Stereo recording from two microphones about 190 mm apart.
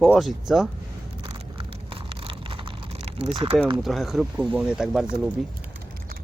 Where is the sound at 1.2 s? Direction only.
30° right (ahead or behind).